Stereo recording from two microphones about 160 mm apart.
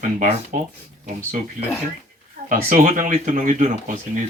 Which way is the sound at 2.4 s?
55° right (ahead or behind).